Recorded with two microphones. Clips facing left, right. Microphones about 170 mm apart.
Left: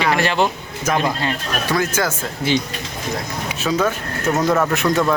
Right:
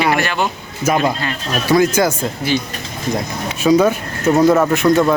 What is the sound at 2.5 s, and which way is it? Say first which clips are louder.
Speech: even; 25° left (ahead or behind).